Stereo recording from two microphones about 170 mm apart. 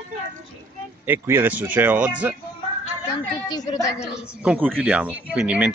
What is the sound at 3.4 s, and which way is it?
Speech, 20° left (ahead or behind).